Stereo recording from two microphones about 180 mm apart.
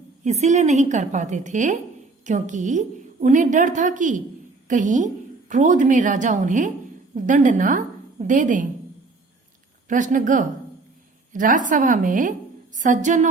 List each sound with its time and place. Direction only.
0.3 s a woman's voice: 40° right (ahead or behind)
9.9 s a woman's voice: 45° right (ahead or behind)